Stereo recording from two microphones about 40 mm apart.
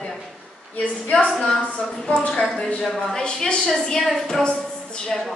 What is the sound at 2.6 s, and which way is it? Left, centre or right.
Speech, centre.